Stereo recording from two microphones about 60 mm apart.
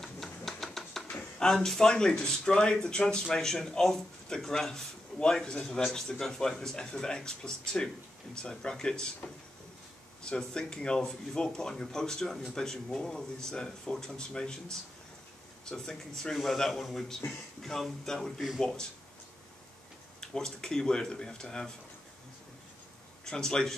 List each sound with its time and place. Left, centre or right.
0.0 s a sound: centre
1.1 s speech: centre
10.2 s speech: centre
20.2 s speech: centre
23.2 s speech: centre